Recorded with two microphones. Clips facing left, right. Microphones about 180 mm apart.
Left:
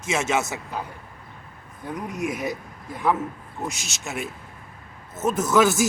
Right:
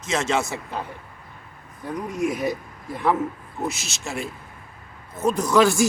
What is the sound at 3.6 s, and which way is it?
Speech, centre (ahead or behind).